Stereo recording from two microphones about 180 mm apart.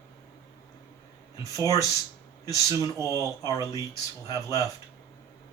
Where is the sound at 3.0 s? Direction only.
15° right (ahead or behind).